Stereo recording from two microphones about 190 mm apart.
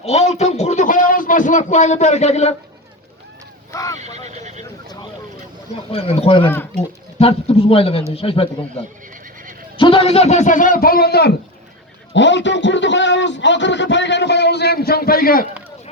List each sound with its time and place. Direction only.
0.0 s a man's voice: 35° left (ahead or behind)
3.7 s speech: 15° left (ahead or behind)
3.9 s speech: 35° right (ahead or behind)
5.9 s speech: 30° left (ahead or behind)
9.7 s a man's voice: 30° left (ahead or behind); by 11.3 s 60° left (ahead or behind)
12.1 s speech: 70° left (ahead or behind); by 15.4 s 50° left (ahead or behind)